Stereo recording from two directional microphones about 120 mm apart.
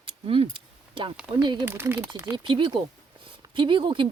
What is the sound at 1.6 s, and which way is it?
Speech, 20° right (ahead or behind).